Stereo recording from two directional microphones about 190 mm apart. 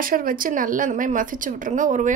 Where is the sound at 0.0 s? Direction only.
50° right (ahead or behind).